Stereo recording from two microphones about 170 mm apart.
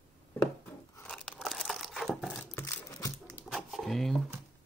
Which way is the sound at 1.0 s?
5° left (ahead or behind).